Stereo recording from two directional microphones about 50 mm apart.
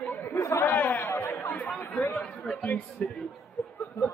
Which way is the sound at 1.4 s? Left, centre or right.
Left.